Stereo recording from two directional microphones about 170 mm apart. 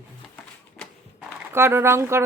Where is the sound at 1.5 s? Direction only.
15° right (ahead or behind).